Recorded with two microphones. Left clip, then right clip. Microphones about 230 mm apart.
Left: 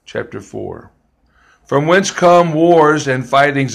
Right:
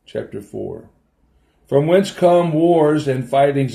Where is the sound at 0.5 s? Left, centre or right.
Left.